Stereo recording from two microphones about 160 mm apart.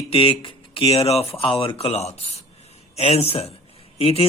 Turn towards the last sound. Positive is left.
turn(degrees=35)  # may be behind; listen again after turning